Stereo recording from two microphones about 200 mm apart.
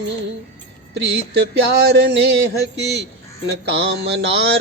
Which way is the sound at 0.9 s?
60° right (ahead or behind).